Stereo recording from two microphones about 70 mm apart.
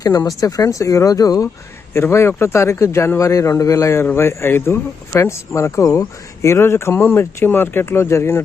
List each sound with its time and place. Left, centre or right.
0.3 s speech: left
1.9 s a man's voice: left
4.0 s speech: left
6.5 s speech: left